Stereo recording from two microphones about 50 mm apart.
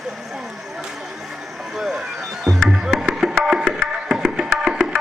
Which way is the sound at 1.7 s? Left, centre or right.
Centre.